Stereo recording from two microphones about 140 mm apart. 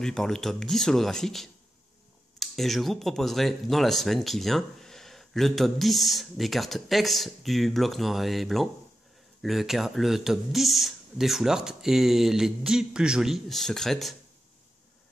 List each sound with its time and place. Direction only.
0.0 s speech: 5° left (ahead or behind)